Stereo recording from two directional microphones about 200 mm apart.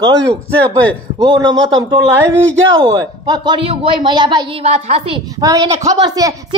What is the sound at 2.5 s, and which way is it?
Speech, 70° right (ahead or behind).